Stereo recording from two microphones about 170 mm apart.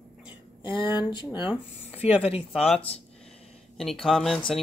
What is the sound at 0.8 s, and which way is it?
Speech, 25° left (ahead or behind).